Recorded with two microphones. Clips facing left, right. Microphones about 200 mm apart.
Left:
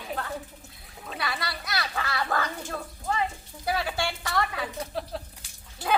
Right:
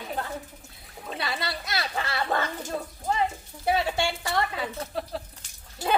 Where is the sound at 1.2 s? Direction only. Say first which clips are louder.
Right 1 dB; 25° right (ahead or behind).